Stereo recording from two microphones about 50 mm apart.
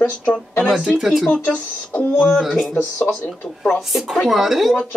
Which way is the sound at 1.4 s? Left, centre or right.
Left.